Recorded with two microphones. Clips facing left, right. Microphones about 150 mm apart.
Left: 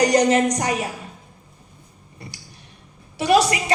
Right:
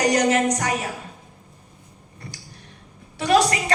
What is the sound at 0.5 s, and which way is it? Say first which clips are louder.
Speech: left 2 dB; 15° left (ahead or behind).